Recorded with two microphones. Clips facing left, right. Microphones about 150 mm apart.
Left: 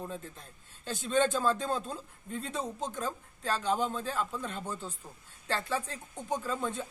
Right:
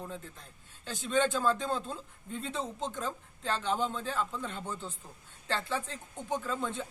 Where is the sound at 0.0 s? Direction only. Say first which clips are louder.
Left 2 dB; 15° left (ahead or behind).